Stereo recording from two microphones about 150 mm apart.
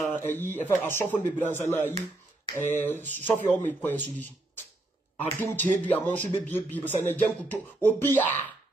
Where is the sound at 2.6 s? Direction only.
15° left (ahead or behind).